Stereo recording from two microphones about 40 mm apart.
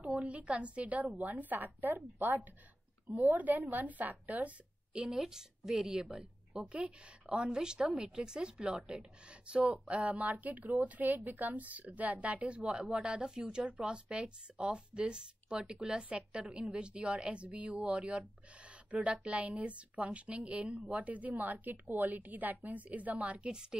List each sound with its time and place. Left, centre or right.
0.0 s a woman's voice: right
3.3 s a woman's voice: right
5.0 s a woman's voice: centre; by 13.2 s right
13.2 s a woman's voice: centre; by 23.5 s right
23.5 s a woman's voice: centre